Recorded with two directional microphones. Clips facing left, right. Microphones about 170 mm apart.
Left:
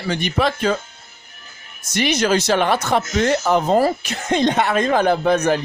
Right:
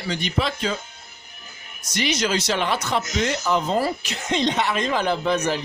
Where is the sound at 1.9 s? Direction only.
55° left (ahead or behind).